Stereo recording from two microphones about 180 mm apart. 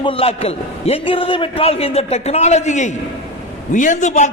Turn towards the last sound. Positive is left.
turn(degrees=40)  # may be behind; listen again after turning